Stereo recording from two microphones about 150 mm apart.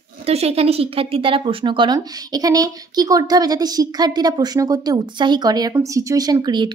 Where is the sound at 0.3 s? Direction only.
45° right (ahead or behind).